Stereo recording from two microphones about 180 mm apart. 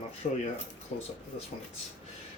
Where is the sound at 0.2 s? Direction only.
45° left (ahead or behind).